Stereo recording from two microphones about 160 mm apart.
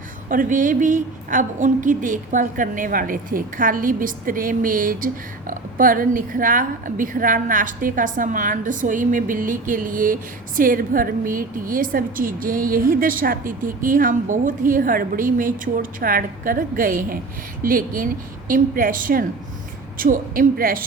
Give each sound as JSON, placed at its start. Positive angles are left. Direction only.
{"t": 0.3, "sound": "a woman's voice", "side_deg": -55}